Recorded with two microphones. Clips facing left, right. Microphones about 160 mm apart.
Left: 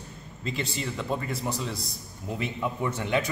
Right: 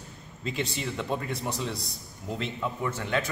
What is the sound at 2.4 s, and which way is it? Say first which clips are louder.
Speech: left 2 dB; 15° left (ahead or behind).